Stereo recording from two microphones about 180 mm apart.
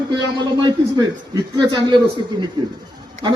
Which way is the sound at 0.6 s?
25° right (ahead or behind).